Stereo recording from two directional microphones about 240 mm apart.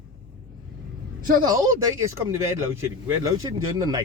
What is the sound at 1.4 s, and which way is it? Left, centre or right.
Speech, centre.